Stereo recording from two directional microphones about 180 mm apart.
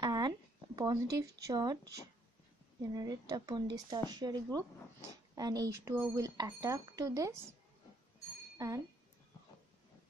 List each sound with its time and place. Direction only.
0.0 s a sound: 25° right (ahead or behind)
0.7 s speech: 20° right (ahead or behind)
2.9 s speech: 20° right (ahead or behind)
8.5 s speech: 20° right (ahead or behind)